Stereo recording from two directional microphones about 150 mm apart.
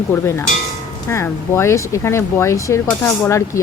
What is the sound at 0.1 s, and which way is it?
Speech, 15° left (ahead or behind).